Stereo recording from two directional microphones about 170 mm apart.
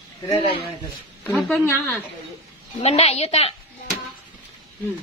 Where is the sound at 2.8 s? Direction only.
35° left (ahead or behind).